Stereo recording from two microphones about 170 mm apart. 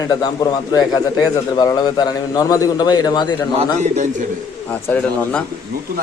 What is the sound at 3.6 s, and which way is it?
Speech, 40° right (ahead or behind).